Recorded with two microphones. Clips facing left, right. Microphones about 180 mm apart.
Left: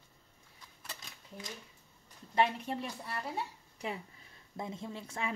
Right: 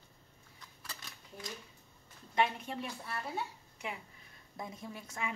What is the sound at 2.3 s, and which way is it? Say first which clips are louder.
Speech: left 2 dB; 35° left (ahead or behind).